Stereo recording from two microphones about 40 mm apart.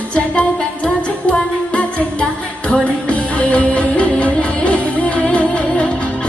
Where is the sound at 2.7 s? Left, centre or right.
Left.